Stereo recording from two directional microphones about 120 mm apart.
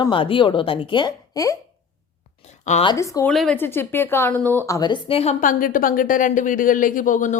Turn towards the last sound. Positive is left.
turn(degrees=90)